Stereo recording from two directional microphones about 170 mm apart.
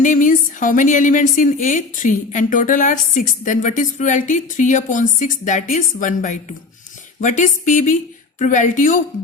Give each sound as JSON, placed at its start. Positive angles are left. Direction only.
{"t": 0.0, "sound": "speech", "side_deg": 50}